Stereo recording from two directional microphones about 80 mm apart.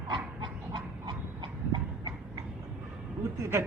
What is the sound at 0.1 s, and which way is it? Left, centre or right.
Dog, right.